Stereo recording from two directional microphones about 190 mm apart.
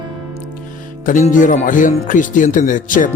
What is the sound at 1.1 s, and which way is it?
Speech, 45° left (ahead or behind).